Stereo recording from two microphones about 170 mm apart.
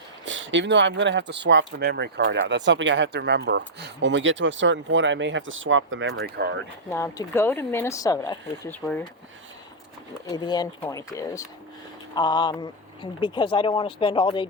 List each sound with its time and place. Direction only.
0.3 s speech: 90° right; by 6.6 s 70° right (ahead or behind)
6.9 s speech: 15° left (ahead or behind)
8.7 s speech: 10° left (ahead or behind)
10.3 s speech: 25° left (ahead or behind)